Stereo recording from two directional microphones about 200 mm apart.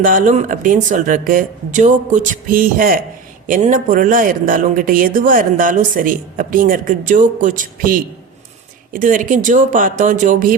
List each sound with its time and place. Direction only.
0.0 s speech: 40° right (ahead or behind)